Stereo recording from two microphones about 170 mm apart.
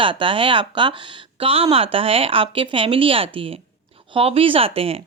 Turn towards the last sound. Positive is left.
turn(degrees=-35)  # may be behind; listen again after turning